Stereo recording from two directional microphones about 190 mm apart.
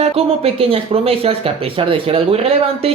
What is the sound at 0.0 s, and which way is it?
Speech, 30° right (ahead or behind).